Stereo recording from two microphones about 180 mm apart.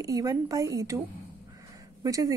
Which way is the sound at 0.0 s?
20° right (ahead or behind).